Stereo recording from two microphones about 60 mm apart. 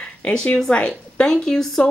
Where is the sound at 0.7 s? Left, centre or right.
Centre.